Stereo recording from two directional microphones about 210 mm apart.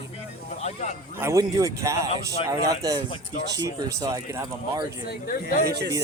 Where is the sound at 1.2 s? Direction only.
15° right (ahead or behind).